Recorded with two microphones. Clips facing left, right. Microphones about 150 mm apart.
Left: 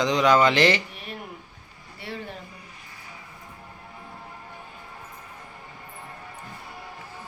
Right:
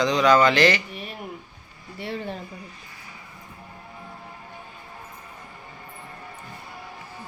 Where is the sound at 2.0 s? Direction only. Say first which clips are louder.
Right 5 dB; 25° right (ahead or behind).